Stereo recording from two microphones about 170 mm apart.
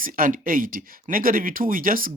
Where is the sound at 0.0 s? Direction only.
55° right (ahead or behind).